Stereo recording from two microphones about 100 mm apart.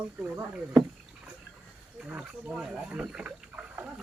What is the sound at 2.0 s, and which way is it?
Speech, 10° right (ahead or behind).